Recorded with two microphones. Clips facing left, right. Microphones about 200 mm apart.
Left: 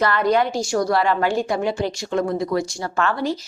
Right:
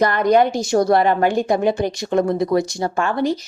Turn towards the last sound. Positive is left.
turn(degrees=-15)  # may be behind; listen again after turning